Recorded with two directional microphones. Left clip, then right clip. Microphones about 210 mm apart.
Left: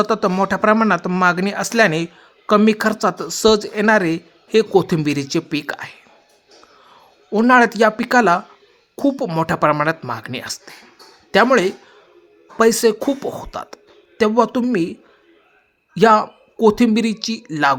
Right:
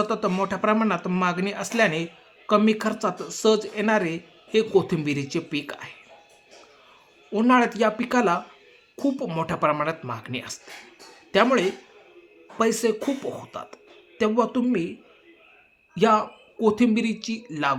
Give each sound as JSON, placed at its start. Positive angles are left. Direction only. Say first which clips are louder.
{"t": 0.0, "sound": "speech", "louder": "left 7 dB", "side_deg": 40}
{"t": 7.3, "sound": "speech", "louder": "left 7 dB", "side_deg": 40}
{"t": 16.0, "sound": "speech", "louder": "left 7 dB", "side_deg": 40}